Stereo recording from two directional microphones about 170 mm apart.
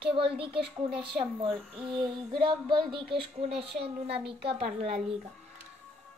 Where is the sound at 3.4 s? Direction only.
35° right (ahead or behind).